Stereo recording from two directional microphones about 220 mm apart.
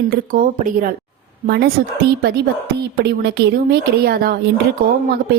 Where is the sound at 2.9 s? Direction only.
45° right (ahead or behind).